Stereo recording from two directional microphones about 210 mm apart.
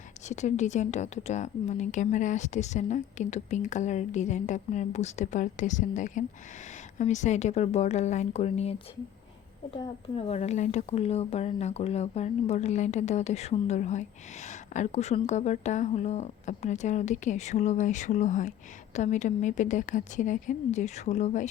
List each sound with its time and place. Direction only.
0.3 s speech: 35° left (ahead or behind)
9.7 s speech: 25° left (ahead or behind)